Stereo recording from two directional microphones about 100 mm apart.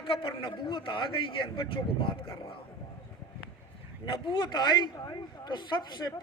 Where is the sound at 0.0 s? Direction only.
60° left (ahead or behind).